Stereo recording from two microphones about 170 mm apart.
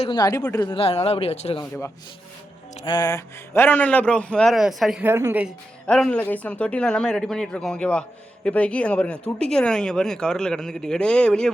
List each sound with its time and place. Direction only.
0.0 s speech: 25° left (ahead or behind)
0.8 s speech: 35° left (ahead or behind)
2.8 s a man's voice: 25° left (ahead or behind); by 5.5 s 10° right (ahead or behind)
5.8 s speech: 5° left (ahead or behind)